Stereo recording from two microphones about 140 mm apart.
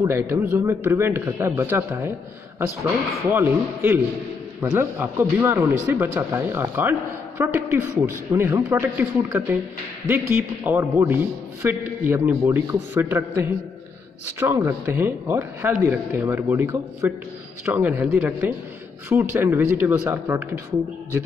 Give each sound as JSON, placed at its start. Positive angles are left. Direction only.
{"t": 0.1, "sound": "a man's voice", "side_deg": -15}